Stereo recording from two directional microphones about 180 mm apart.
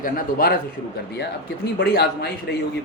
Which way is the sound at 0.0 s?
50° left (ahead or behind).